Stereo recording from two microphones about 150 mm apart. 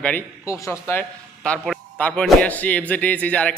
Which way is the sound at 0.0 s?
10° left (ahead or behind).